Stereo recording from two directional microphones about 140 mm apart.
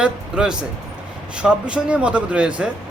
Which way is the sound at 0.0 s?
5° right (ahead or behind).